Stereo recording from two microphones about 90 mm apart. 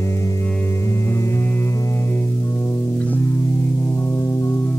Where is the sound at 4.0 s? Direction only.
30° left (ahead or behind).